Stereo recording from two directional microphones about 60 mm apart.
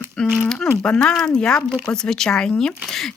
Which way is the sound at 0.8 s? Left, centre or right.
Centre.